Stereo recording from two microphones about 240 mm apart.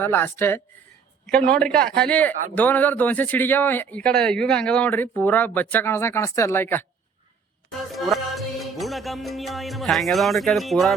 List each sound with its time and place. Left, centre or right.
0.0 s a man's voice: centre
7.9 s music: centre